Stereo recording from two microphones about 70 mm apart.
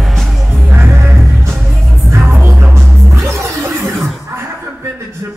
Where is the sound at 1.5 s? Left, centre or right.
Centre.